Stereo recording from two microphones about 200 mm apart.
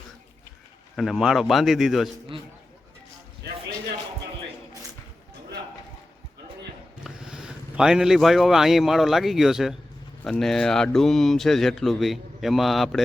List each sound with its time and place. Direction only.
0.9 s speech: centre (ahead or behind)
7.0 s speech: 5° right (ahead or behind)